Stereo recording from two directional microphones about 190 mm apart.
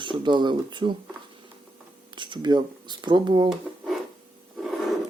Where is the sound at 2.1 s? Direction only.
25° right (ahead or behind).